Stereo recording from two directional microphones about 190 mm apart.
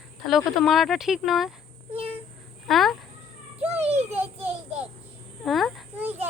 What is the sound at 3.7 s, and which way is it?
Child singing, 35° right (ahead or behind).